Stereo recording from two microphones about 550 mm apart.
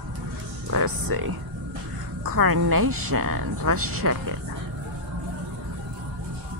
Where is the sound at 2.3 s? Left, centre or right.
Right.